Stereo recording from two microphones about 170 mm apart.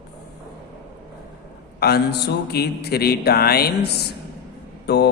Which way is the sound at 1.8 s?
70° left (ahead or behind).